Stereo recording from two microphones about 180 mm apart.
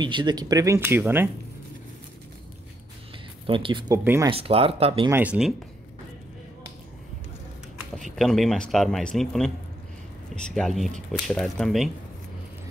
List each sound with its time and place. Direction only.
0.0 s speech: 25° right (ahead or behind)
3.4 s speech: 30° right (ahead or behind)
4.0 s speech: 10° right (ahead or behind)
4.3 s speech: 35° right (ahead or behind)
5.1 s speech: 5° right (ahead or behind)
8.0 s speech: centre (ahead or behind)